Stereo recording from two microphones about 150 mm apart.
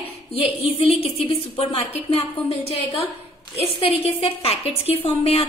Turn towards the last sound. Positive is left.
turn(degrees=40)  # may be behind; listen again after turning